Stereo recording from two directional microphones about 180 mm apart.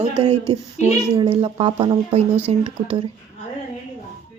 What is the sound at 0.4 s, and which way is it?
Speech, 15° left (ahead or behind).